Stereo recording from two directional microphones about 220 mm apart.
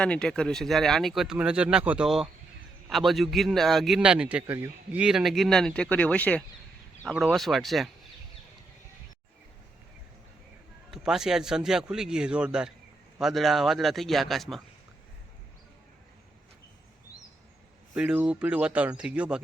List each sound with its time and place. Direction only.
0.0 s a man's voice: 5° left (ahead or behind)
10.9 s a man's voice: centre (ahead or behind)
17.9 s a man's voice: 5° right (ahead or behind)